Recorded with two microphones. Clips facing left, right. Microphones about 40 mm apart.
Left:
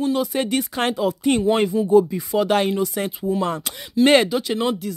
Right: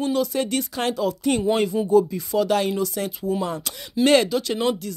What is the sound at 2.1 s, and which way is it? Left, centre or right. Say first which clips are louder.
Speech: left 2 dB; left.